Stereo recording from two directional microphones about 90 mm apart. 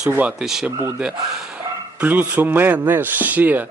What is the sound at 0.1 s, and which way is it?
Speech, 20° right (ahead or behind).